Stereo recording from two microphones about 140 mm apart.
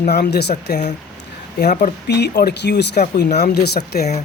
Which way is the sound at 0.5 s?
55° left (ahead or behind).